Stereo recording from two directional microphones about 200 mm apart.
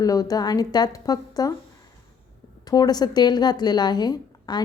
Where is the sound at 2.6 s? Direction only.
20° left (ahead or behind).